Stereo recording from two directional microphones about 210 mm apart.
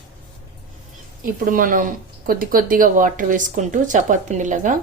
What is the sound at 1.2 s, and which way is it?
A woman's voice, 40° right (ahead or behind).